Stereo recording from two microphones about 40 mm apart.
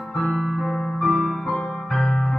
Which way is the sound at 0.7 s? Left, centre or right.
Centre.